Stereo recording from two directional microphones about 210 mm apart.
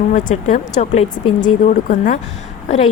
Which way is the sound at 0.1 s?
35° left (ahead or behind).